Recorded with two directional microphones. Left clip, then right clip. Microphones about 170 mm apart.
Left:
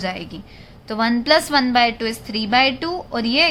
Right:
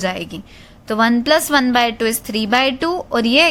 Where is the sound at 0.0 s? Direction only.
45° right (ahead or behind).